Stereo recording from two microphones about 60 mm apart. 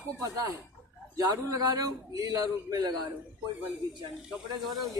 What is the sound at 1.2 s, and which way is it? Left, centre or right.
A man's voice, right.